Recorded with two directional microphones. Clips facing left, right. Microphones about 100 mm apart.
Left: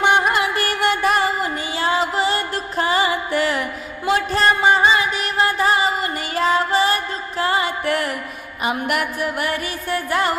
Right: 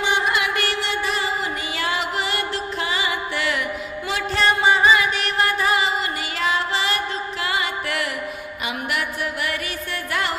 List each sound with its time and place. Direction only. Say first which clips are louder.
0.0 s music: left 5 dB; 55° left (ahead or behind)
0.3 s music: left 3 dB; 35° left (ahead or behind)
1.8 s music: left 6 dB; 30° left (ahead or behind)
4.8 s music: even; 30° left (ahead or behind)